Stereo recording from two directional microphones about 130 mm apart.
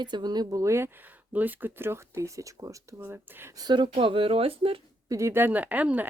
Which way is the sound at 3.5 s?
35° right (ahead or behind).